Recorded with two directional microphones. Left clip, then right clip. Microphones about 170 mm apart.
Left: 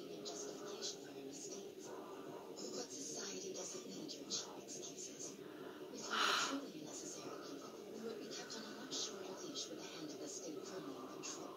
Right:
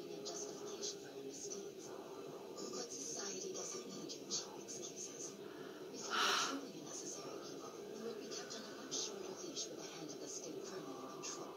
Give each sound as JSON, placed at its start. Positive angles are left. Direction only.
{"t": 6.0, "sound": "bird", "side_deg": -10}